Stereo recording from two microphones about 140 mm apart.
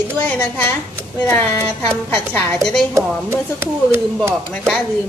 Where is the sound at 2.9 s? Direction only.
15° right (ahead or behind).